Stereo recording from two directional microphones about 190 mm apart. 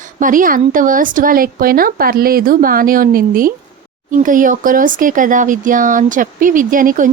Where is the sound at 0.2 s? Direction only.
45° right (ahead or behind).